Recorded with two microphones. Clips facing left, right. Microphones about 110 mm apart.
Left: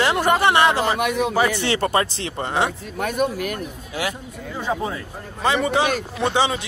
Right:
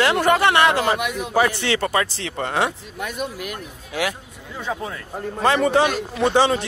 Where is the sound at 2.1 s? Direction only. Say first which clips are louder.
Even; 25° left (ahead or behind).